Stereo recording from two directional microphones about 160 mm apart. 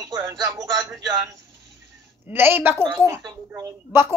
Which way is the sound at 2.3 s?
15° right (ahead or behind).